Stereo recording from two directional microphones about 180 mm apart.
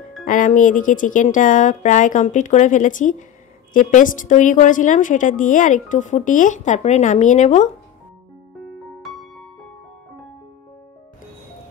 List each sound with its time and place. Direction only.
0.2 s a woman's voice: 45° left (ahead or behind)
9.0 s music: centre (ahead or behind)